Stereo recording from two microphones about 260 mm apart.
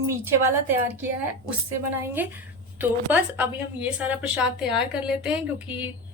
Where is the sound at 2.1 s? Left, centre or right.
Centre.